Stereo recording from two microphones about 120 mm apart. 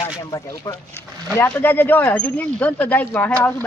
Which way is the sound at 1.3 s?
15° left (ahead or behind).